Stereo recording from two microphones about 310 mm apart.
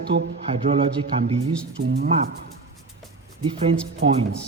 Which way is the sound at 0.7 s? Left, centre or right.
Centre.